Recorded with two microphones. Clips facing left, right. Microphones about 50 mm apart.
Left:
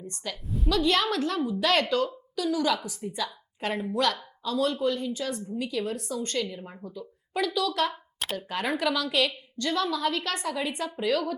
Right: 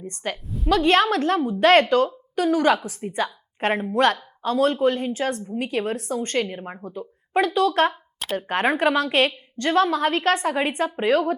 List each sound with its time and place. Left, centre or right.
0.0 s a woman's voice: right
0.4 s a woman's voice: centre
0.7 s speech: right